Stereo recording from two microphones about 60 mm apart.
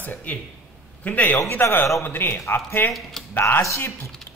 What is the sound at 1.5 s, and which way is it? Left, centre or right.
A man's voice, left.